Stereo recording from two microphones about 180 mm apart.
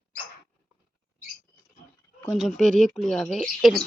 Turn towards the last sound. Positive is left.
turn(degrees=0)  # may be behind; listen again after turning